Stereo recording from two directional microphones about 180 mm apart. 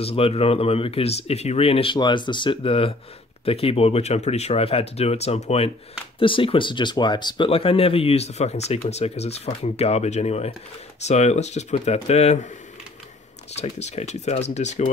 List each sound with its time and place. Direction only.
0.0 s speech: 35° left (ahead or behind)
13.5 s speech: 40° left (ahead or behind)